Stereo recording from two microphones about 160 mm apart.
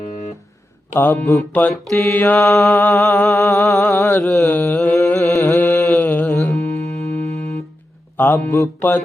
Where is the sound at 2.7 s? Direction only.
15° left (ahead or behind).